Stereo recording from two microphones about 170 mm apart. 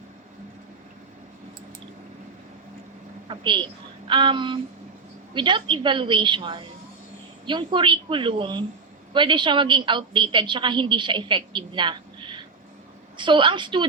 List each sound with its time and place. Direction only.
3.2 s a woman's voice: 30° right (ahead or behind)